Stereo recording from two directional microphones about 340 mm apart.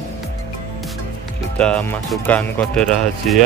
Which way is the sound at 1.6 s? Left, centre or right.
Centre.